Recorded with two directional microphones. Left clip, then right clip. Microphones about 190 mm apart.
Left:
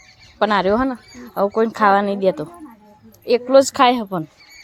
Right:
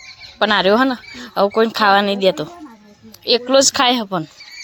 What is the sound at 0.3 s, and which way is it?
Speech, centre (ahead or behind).